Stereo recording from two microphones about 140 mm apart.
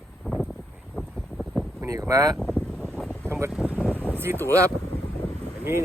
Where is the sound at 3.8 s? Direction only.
10° left (ahead or behind).